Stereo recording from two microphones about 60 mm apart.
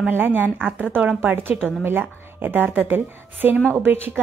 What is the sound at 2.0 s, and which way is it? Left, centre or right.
A woman's voice, right.